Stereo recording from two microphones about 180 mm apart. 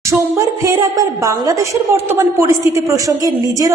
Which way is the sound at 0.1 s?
15° right (ahead or behind).